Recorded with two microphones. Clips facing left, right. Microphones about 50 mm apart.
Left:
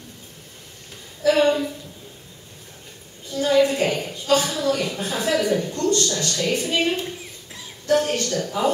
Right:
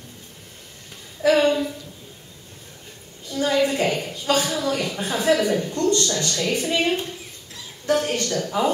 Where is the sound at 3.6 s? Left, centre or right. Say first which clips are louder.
Left 2 dB; right.